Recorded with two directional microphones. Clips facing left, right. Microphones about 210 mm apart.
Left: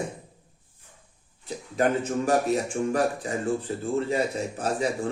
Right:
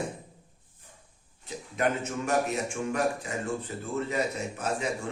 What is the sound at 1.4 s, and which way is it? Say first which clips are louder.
A man's voice: left 4 dB; 35° left (ahead or behind).